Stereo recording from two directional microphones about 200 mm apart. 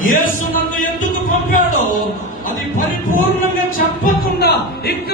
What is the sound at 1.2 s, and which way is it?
Music, 40° left (ahead or behind).